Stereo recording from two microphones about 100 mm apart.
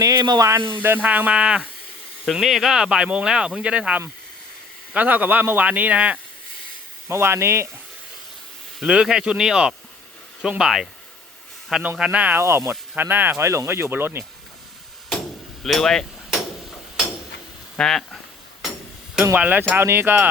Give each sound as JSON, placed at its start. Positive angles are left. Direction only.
{"t": 0.0, "sound": "speech", "side_deg": -40}
{"t": 0.8, "sound": "speech", "side_deg": -20}
{"t": 7.1, "sound": "speech", "side_deg": -25}
{"t": 8.8, "sound": "speech", "side_deg": -5}
{"t": 11.9, "sound": "speech", "side_deg": -10}
{"t": 12.4, "sound": "speech", "side_deg": -25}
{"t": 15.6, "sound": "hammer", "side_deg": 5}
{"t": 17.7, "sound": "speech", "side_deg": 5}
{"t": 19.4, "sound": "speech", "side_deg": -15}